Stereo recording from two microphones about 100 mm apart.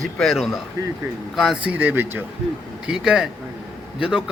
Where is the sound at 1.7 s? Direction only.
15° right (ahead or behind).